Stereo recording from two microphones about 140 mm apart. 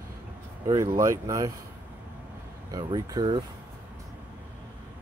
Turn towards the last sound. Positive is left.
turn(degrees=-30)  # may be behind; listen again after turning